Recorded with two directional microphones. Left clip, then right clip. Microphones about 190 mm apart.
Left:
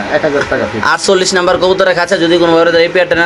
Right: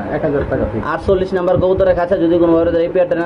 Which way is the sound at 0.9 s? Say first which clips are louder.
Left 6 dB; 25° left (ahead or behind).